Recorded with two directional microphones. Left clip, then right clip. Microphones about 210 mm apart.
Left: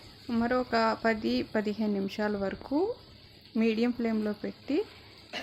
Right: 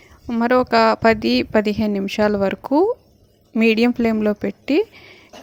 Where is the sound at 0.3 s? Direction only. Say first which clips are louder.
Right 12 dB; 40° right (ahead or behind).